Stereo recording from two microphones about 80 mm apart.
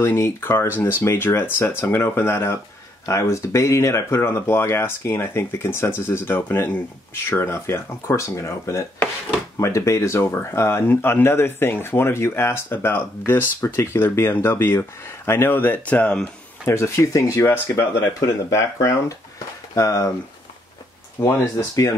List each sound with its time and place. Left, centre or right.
0.0 s speech: left; by 16.2 s centre
16.6 s speech: left
21.2 s speech: left